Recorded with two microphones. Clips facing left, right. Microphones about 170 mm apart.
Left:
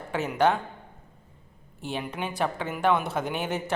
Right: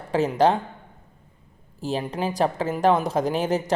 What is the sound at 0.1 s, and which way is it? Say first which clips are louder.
Speech: right 4 dB; 35° right (ahead or behind).